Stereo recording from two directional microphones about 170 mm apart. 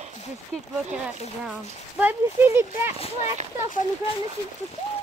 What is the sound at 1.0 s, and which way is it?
Speech, 5° right (ahead or behind).